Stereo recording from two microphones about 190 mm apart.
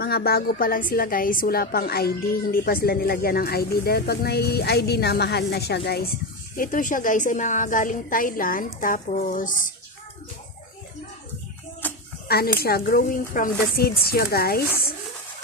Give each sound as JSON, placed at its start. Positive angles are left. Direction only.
{"t": 0.0, "sound": "a woman's voice", "side_deg": 55}
{"t": 12.5, "sound": "a woman's voice", "side_deg": 55}